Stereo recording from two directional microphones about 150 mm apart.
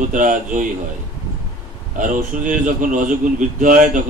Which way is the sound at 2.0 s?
60° right (ahead or behind).